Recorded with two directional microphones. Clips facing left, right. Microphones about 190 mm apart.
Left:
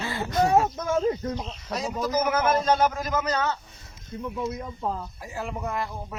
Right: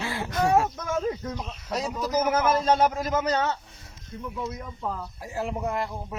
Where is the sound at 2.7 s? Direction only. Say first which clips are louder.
Right 1 dB; 30° right (ahead or behind).